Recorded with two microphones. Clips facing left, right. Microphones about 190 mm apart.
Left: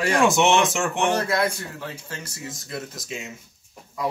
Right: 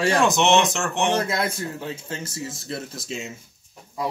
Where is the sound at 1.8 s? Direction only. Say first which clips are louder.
Right 4 dB; 25° right (ahead or behind).